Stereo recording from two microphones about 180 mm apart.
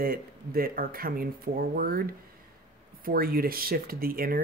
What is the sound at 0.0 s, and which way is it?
Speech, 55° right (ahead or behind).